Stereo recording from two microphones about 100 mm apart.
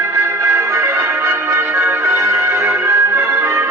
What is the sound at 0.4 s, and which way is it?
Music, 25° right (ahead or behind).